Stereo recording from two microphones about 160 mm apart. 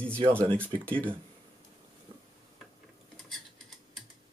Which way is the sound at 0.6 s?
10° left (ahead or behind).